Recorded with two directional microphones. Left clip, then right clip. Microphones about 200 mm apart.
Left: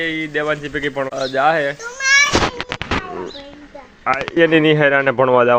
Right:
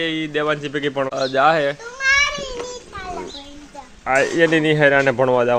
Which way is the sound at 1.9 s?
50° left (ahead or behind).